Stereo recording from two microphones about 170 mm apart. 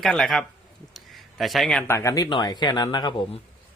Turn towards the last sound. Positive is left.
turn(degrees=30)  # may be behind; listen again after turning